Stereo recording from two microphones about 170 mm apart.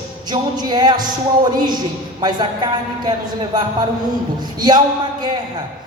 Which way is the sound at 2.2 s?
25° right (ahead or behind).